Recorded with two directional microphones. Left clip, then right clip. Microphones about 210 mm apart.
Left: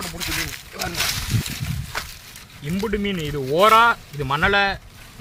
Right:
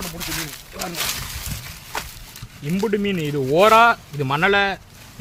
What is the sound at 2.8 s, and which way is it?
Speech, 30° right (ahead or behind).